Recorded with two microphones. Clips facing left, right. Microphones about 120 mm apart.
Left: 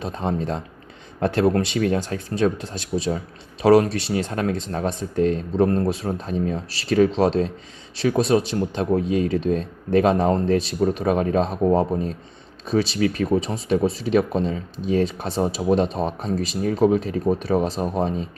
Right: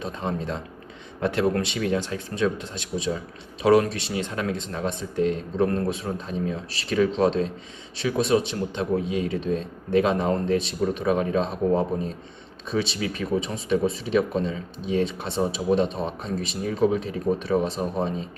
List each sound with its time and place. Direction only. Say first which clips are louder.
0.0 s speech: left 4 dB; 35° left (ahead or behind)